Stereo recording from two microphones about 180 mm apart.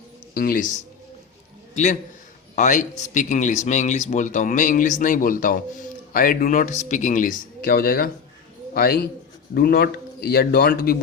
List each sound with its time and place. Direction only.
0.3 s a man's voice: 55° left (ahead or behind)
1.7 s a man's voice: 40° left (ahead or behind)